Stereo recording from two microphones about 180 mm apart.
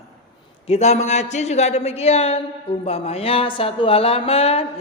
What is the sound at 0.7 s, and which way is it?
A man's voice, 35° left (ahead or behind).